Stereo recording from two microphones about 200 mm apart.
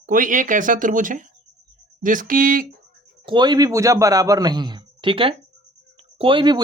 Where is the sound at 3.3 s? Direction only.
20° right (ahead or behind).